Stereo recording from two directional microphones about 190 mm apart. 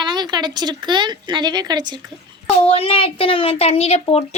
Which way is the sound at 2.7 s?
30° left (ahead or behind).